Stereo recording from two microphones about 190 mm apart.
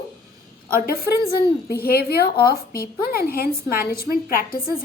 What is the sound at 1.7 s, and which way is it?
A woman's voice, 55° left (ahead or behind).